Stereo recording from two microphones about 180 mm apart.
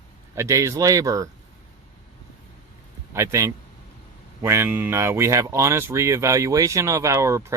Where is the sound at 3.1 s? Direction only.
15° right (ahead or behind).